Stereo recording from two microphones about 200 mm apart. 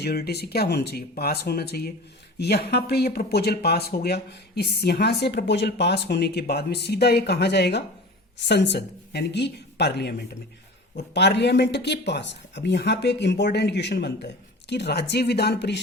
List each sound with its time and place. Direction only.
0.0 s speech: 50° left (ahead or behind)